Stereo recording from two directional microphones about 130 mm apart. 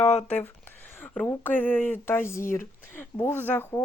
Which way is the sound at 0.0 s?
55° left (ahead or behind).